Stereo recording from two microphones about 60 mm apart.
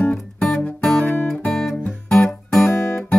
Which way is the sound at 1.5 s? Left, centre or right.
Centre.